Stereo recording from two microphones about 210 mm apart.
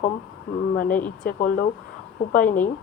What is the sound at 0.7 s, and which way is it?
Speech, 40° left (ahead or behind).